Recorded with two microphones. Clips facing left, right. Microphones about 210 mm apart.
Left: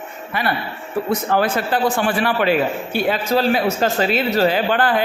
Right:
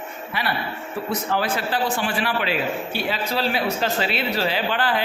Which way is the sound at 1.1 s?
50° left (ahead or behind).